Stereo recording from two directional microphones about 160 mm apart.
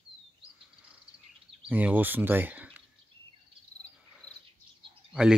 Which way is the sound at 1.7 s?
10° right (ahead or behind).